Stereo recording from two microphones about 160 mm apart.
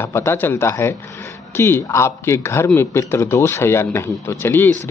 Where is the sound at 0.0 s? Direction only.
15° left (ahead or behind).